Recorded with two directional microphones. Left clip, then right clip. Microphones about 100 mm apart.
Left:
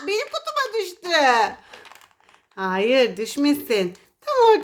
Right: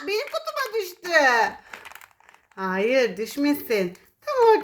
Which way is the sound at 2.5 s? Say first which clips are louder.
Left 3 dB; 20° left (ahead or behind).